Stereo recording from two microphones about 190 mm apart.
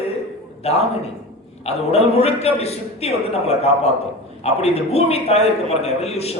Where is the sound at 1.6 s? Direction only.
35° left (ahead or behind).